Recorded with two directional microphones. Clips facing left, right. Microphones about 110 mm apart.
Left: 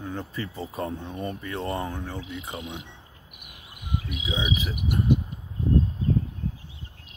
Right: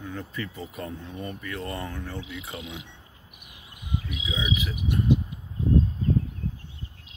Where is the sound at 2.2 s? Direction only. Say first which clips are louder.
Left 2 dB; 45° left (ahead or behind).